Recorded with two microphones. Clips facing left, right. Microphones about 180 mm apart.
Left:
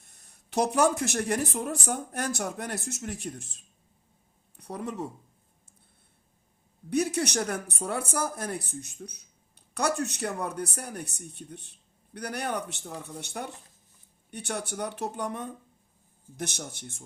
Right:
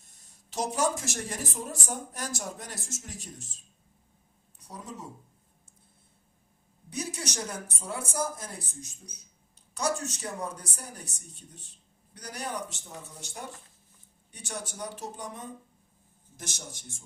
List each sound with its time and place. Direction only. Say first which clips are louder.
0.0 s speech: left 1 dB; 60° left (ahead or behind)
6.9 s speech: left 9 dB; 60° left (ahead or behind)